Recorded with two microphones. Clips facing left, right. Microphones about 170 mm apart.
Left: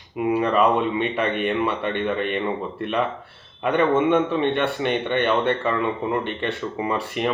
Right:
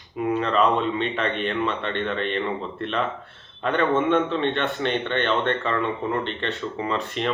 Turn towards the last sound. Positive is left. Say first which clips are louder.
# left 2 dB
turn(degrees=10)  # may be behind; listen again after turning